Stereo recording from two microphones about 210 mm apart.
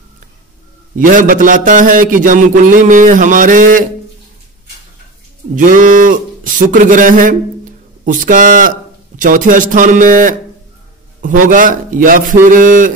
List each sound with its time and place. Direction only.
0.9 s a man's voice: 40° right (ahead or behind)
5.6 s a sound: 40° right (ahead or behind)
9.2 s a man's voice: 40° right (ahead or behind)
11.4 s a man's voice: 40° right (ahead or behind)